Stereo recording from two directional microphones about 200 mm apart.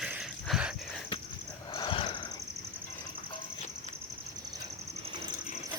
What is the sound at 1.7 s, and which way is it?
Wheeze, 25° left (ahead or behind).